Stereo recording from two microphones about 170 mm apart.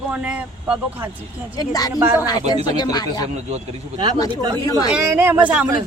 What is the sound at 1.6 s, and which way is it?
A man's voice, 20° left (ahead or behind).